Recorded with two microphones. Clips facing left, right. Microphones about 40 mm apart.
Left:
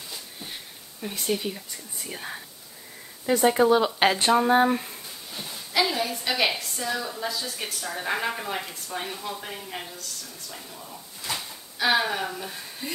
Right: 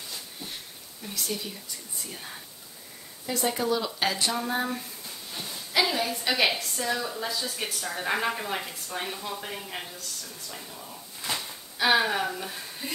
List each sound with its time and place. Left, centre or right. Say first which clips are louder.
1.0 s speech: left 6 dB; left
5.3 s a woman's voice: left 1 dB; centre